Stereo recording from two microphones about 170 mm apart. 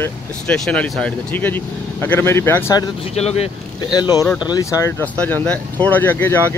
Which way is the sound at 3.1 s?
40° left (ahead or behind).